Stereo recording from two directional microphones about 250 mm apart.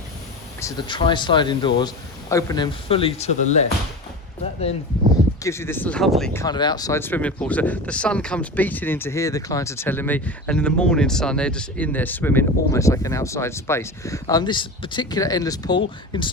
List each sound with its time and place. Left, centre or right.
0.6 s speech: centre
5.4 s speech: centre
6.4 s speech: centre